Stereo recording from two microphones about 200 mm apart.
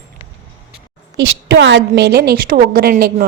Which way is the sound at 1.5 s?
70° right (ahead or behind).